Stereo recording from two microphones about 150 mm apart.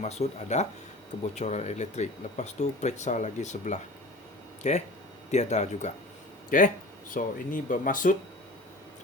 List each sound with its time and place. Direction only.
0.0 s speech: 50° left (ahead or behind)
6.5 s speech: 65° left (ahead or behind)